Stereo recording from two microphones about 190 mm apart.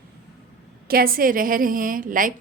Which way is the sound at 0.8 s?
50° right (ahead or behind).